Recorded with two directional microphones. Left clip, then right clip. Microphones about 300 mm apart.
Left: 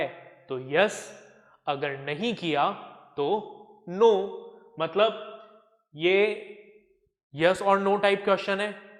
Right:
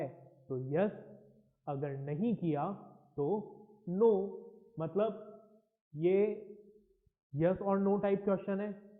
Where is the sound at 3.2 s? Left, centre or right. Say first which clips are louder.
Left 9 dB; left.